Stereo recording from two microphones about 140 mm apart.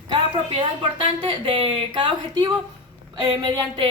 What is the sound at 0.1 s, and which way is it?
A woman's voice, 35° right (ahead or behind).